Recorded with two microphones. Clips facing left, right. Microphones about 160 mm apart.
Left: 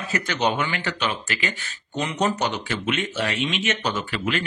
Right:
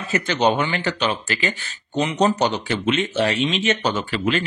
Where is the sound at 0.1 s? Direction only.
30° right (ahead or behind).